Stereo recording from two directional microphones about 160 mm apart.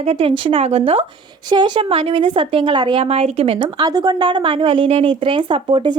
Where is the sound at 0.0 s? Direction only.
35° right (ahead or behind).